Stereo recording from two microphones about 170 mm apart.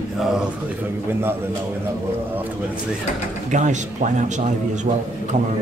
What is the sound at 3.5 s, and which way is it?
Speech, 45° right (ahead or behind).